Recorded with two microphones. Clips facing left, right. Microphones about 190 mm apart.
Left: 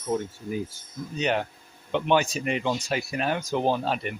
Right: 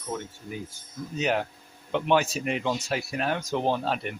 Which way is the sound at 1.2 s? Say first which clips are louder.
Even; 5° right (ahead or behind).